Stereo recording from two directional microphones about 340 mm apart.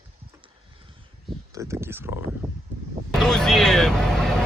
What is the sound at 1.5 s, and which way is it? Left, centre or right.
Speech, centre.